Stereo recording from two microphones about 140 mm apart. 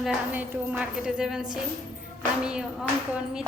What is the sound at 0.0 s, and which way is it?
A woman's voice, 10° right (ahead or behind).